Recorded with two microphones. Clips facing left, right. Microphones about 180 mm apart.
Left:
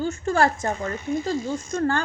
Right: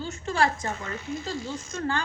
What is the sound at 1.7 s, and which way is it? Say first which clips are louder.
Speech: left 6 dB; 50° left (ahead or behind).